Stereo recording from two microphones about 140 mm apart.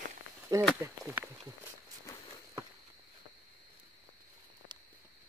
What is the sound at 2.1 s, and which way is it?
Walk, 20° left (ahead or behind).